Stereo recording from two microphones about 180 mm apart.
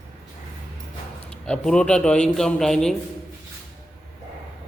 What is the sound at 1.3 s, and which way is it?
Speech, 5° left (ahead or behind).